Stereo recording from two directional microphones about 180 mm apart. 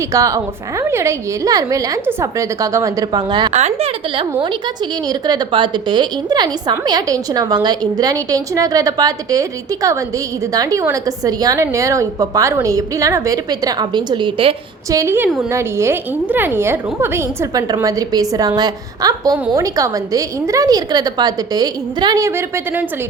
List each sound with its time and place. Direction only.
0.1 s a woman's voice: 20° right (ahead or behind)
3.5 s a woman's voice: 35° right (ahead or behind)
14.8 s a woman's voice: 15° right (ahead or behind)